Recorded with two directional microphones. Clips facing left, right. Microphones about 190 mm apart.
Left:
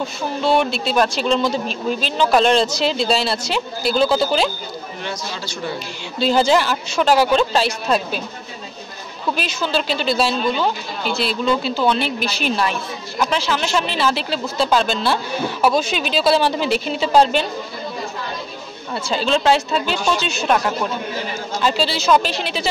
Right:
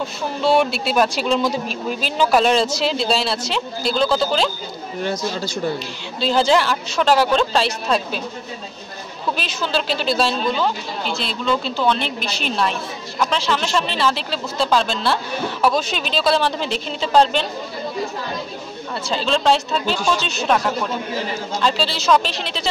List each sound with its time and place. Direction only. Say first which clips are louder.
0.0 s speech: even; 5° right (ahead or behind)
5.0 s speech: right 7 dB; 45° right (ahead or behind)
6.1 s speech: left 1 dB; centre (ahead or behind)
9.4 s speech: left 2 dB; centre (ahead or behind)
19.0 s speech: left 1 dB; 5° left (ahead or behind)
21.5 s speech: left 2 dB; 5° left (ahead or behind)